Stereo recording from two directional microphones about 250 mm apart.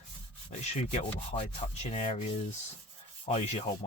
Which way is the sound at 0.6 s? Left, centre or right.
Left.